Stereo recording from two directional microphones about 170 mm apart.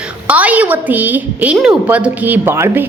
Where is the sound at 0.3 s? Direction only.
10° right (ahead or behind).